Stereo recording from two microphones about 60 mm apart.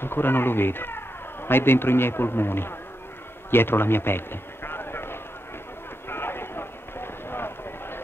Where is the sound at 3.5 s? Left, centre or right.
Left.